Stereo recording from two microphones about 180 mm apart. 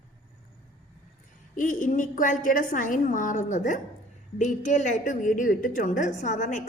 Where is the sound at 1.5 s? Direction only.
45° left (ahead or behind).